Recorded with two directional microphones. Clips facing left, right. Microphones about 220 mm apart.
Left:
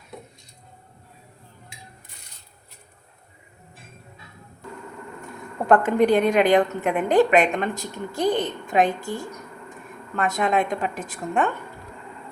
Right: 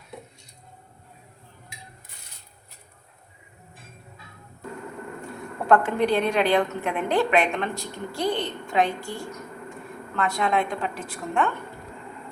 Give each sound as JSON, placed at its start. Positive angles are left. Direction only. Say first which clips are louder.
{"t": 5.6, "sound": "a woman's voice", "louder": "left 3 dB", "side_deg": 15}
{"t": 10.2, "sound": "a woman's voice", "louder": "left 2 dB", "side_deg": 20}